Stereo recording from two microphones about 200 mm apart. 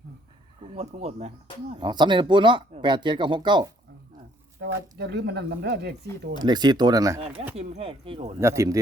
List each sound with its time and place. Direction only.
0.6 s speech: 30° right (ahead or behind)
1.7 s speech: 20° right (ahead or behind)
4.6 s speech: 55° right (ahead or behind)
6.4 s speech: 20° right (ahead or behind)
7.5 s speech: 30° right (ahead or behind)
8.4 s speech: 15° right (ahead or behind)